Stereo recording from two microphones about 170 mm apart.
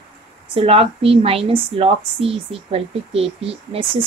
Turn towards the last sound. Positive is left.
turn(degrees=-35)  # may be behind; listen again after turning